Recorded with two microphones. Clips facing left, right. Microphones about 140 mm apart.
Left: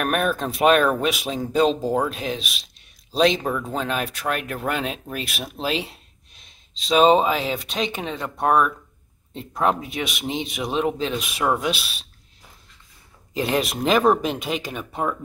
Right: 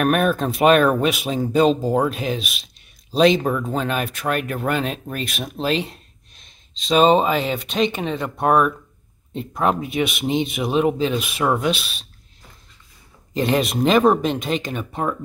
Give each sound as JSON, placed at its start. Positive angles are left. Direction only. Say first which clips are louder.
{"t": 0.0, "sound": "speech", "louder": "right 4 dB", "side_deg": 0}
{"t": 13.3, "sound": "speech", "louder": "right 3 dB", "side_deg": 0}